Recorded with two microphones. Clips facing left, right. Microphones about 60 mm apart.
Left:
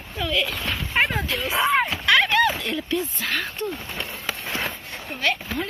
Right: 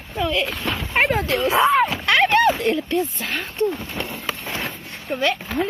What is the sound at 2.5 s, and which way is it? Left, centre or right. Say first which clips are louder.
Dog: right 6 dB; right.